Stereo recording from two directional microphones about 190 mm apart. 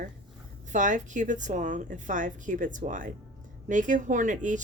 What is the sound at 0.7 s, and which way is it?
A woman's voice, 40° right (ahead or behind).